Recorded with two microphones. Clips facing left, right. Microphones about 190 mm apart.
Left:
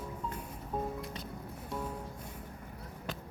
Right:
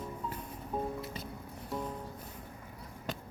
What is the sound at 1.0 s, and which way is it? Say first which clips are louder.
Music: right 1 dB; 5° right (ahead or behind).